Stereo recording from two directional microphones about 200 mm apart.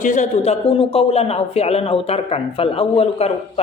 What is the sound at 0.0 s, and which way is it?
Speech, 40° left (ahead or behind).